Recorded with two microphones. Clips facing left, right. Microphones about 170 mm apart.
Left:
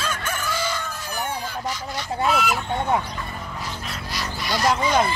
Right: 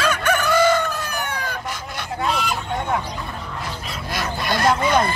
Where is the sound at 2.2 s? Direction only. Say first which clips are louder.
Left 2 dB; 5° left (ahead or behind).